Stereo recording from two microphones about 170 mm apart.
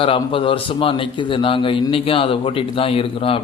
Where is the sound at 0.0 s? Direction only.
30° left (ahead or behind).